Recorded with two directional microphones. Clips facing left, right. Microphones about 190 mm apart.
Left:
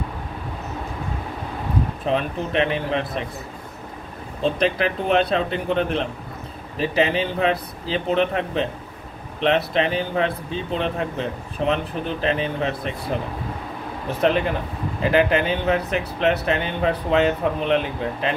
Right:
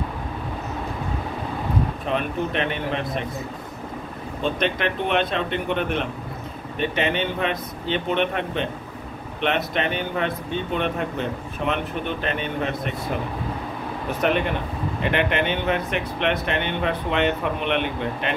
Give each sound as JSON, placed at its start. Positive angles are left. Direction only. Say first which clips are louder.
{"t": 2.0, "sound": "speech", "louder": "left 4 dB", "side_deg": 35}
{"t": 4.4, "sound": "speech", "louder": "left 3 dB", "side_deg": 35}
{"t": 9.8, "sound": "speech", "louder": "left 3 dB", "side_deg": 35}
{"t": 15.0, "sound": "speech", "louder": "left 4 dB", "side_deg": 35}